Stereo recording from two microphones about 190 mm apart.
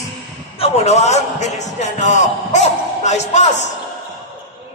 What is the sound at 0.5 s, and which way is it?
Speech, 30° left (ahead or behind).